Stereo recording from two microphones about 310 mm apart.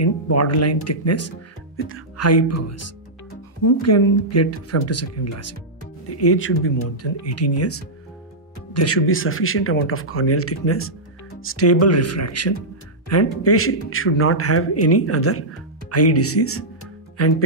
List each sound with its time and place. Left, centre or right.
0.0 s speech: left
7.2 s speech: left